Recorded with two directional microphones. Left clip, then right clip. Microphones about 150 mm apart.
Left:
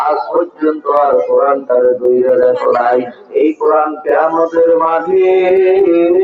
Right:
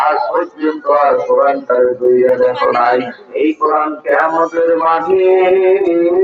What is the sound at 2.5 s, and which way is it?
Speech, 15° left (ahead or behind).